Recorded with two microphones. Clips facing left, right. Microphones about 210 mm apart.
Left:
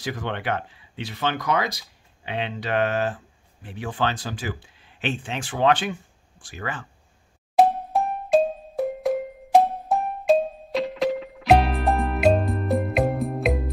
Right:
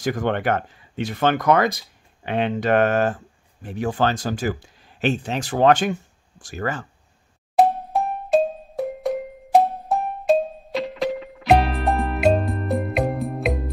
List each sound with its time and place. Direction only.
0.0 s speech: 45° right (ahead or behind)
7.5 s music: centre (ahead or behind)